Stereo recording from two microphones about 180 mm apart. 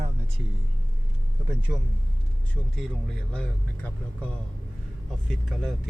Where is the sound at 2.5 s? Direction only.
Centre (ahead or behind).